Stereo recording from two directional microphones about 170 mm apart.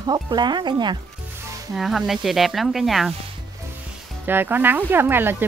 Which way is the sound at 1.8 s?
Centre (ahead or behind).